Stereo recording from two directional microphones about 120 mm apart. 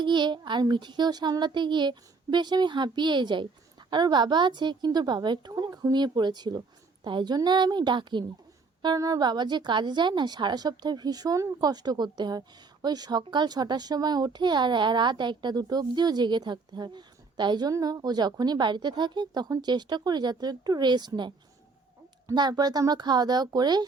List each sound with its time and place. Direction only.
0.0 s a child's voice: 40° right (ahead or behind)